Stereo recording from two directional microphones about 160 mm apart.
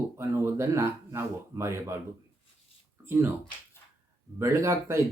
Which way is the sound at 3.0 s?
15° right (ahead or behind).